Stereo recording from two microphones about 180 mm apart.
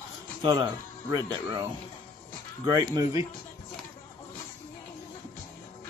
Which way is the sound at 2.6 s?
20° right (ahead or behind).